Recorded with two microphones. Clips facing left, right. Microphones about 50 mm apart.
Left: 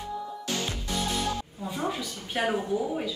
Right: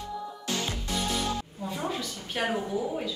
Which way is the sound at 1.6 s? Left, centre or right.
Centre.